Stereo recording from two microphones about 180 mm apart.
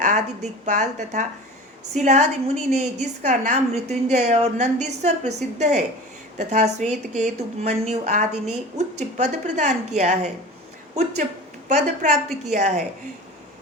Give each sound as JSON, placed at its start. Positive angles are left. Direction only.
{"t": 0.0, "sound": "a woman's voice", "side_deg": -40}